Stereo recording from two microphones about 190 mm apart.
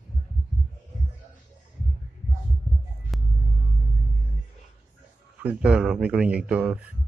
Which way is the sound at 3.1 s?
Centre (ahead or behind).